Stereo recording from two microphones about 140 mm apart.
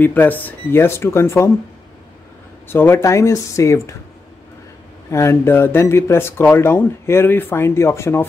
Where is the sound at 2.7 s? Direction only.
15° left (ahead or behind).